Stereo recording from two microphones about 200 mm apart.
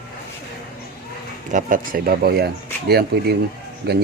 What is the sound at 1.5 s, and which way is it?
Speech, 40° right (ahead or behind).